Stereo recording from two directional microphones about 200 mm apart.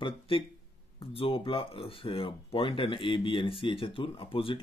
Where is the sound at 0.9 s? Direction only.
30° left (ahead or behind).